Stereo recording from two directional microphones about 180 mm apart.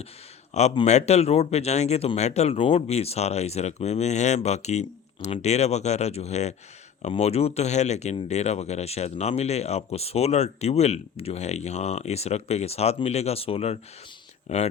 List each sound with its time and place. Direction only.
0.5 s speech: 30° left (ahead or behind)